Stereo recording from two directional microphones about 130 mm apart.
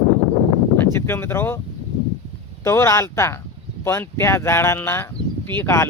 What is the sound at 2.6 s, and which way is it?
Speech, 20° left (ahead or behind).